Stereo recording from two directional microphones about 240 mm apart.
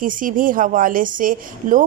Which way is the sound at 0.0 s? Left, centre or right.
Right.